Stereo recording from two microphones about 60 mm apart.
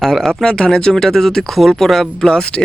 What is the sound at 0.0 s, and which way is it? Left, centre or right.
Speech, centre.